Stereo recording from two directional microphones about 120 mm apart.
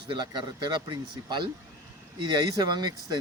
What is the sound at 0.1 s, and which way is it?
A man's voice, 35° right (ahead or behind).